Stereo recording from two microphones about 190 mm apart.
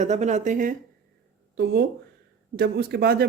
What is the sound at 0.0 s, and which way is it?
Speech, 35° right (ahead or behind).